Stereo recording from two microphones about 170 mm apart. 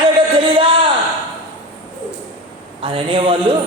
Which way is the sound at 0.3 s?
30° right (ahead or behind).